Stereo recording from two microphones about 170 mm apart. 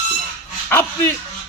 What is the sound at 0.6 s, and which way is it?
Speech, 10° left (ahead or behind).